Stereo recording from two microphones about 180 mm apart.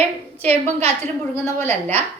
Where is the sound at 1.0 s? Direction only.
15° left (ahead or behind).